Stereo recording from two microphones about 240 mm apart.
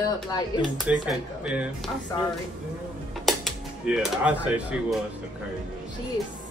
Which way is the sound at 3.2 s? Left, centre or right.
Centre.